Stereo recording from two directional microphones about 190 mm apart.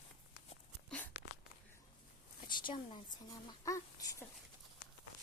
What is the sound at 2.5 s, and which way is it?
Speech, 25° left (ahead or behind).